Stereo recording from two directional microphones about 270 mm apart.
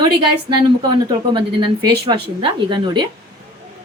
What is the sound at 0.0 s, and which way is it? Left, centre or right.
A woman's voice, centre.